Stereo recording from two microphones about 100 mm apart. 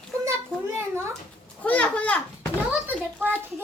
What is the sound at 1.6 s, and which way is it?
Children playing, 15° left (ahead or behind).